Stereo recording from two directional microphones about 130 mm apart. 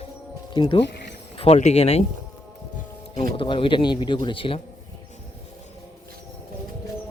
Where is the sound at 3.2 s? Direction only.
40° left (ahead or behind).